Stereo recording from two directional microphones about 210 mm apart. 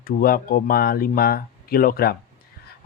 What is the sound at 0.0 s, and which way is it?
Speech, 45° left (ahead or behind).